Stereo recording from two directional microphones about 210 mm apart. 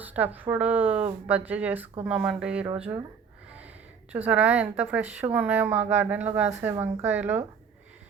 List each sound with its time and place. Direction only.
0.0 s a woman's voice: 10° right (ahead or behind)
2.7 s speech: 30° right (ahead or behind)
4.1 s a woman's voice: 5° right (ahead or behind)